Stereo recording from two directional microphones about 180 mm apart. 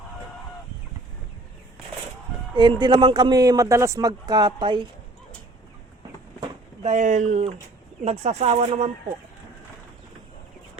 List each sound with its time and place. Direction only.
2.6 s a man's voice: 25° right (ahead or behind)
6.8 s speech: 40° right (ahead or behind)